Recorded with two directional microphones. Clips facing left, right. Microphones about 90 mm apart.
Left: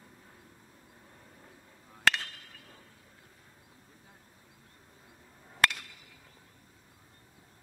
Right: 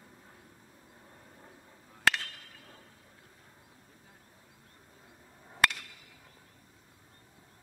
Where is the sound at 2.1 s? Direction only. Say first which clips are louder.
Even; centre (ahead or behind).